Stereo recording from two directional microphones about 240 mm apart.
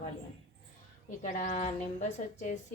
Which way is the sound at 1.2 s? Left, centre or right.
Left.